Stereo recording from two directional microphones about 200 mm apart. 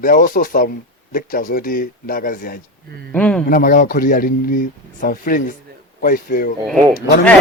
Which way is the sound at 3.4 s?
45° left (ahead or behind).